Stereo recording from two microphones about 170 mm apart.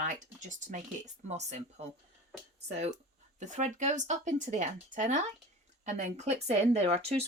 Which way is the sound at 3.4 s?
45° right (ahead or behind).